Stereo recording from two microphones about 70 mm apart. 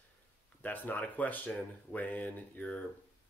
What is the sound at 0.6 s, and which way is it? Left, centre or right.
Speech, left.